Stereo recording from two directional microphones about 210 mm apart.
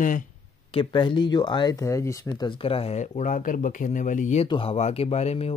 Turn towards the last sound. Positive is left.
turn(degrees=30)  # may be behind; listen again after turning